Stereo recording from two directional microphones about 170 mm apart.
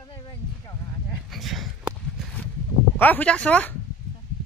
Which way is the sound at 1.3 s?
Centre (ahead or behind).